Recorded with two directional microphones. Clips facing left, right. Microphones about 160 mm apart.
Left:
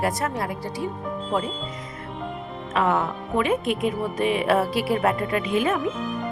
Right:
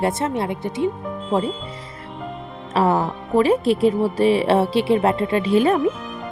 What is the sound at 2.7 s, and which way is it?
Speech, 35° right (ahead or behind).